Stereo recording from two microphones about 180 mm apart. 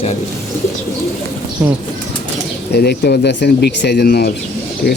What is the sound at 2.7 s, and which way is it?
A man's voice, 65° left (ahead or behind).